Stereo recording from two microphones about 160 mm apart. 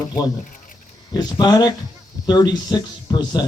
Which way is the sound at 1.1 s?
25° left (ahead or behind).